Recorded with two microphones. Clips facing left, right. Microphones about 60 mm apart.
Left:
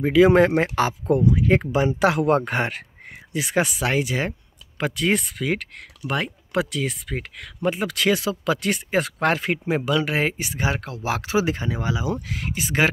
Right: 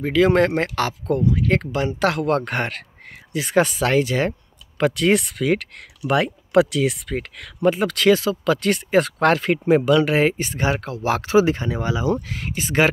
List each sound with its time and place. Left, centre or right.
0.0 s speech: centre
7.1 s speech: centre
10.8 s speech: right
11.5 s speech: centre